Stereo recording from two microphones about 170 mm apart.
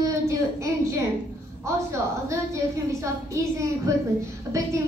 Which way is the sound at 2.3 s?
15° right (ahead or behind).